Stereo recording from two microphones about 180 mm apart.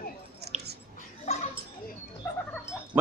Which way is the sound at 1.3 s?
40° left (ahead or behind).